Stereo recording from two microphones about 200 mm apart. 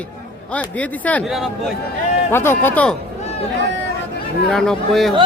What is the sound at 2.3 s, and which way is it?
Speech, 10° left (ahead or behind).